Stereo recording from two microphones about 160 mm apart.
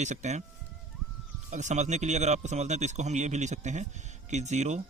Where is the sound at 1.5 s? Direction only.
50° right (ahead or behind).